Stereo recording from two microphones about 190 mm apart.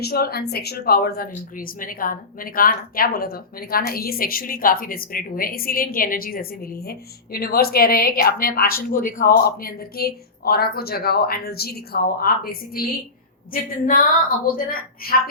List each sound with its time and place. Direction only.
0.0 s speech: 55° left (ahead or behind)